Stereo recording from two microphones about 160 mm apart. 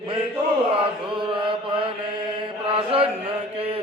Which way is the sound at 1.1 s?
30° right (ahead or behind).